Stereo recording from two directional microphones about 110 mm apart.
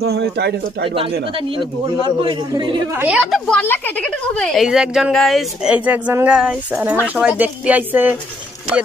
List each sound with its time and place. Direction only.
1.6 s a man's voice: 45° right (ahead or behind)
3.1 s speech: 5° right (ahead or behind)
3.6 s speech: 20° left (ahead or behind)
4.4 s speech: 5° left (ahead or behind)
4.6 s a sound: 5° right (ahead or behind)